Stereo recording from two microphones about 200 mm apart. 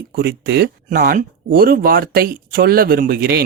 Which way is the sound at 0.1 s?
50° right (ahead or behind).